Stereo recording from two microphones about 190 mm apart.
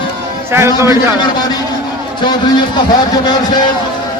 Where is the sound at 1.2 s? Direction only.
20° left (ahead or behind).